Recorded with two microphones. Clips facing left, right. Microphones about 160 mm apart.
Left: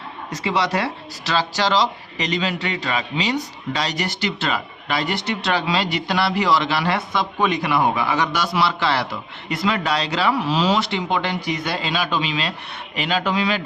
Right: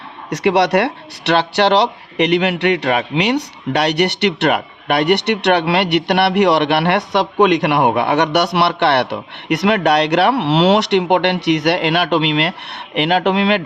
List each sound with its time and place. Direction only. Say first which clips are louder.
0.3 s speech: right 8 dB; 70° right (ahead or behind)